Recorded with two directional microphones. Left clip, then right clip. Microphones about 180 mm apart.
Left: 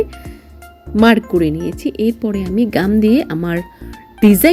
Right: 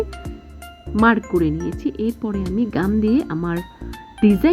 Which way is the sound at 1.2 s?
Centre (ahead or behind).